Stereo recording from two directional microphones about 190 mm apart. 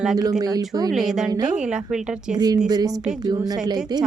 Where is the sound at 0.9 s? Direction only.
Centre (ahead or behind).